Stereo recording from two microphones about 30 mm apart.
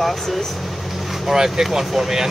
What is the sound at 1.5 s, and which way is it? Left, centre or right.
Speech, centre.